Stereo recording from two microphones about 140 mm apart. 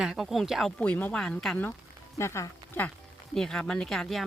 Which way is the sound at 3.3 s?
5° left (ahead or behind).